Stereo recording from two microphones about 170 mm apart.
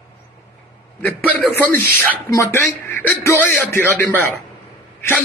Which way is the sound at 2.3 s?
15° left (ahead or behind).